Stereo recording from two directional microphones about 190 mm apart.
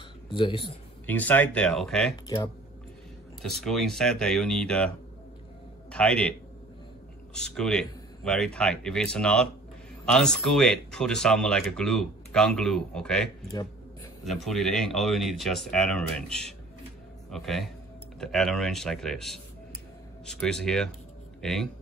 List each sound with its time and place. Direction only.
0.3 s speech: 25° left (ahead or behind)
1.0 s speech: 10° left (ahead or behind)
2.2 s speech: 20° left (ahead or behind)
3.4 s a man's voice: centre (ahead or behind)
7.3 s speech: 5° left (ahead or behind)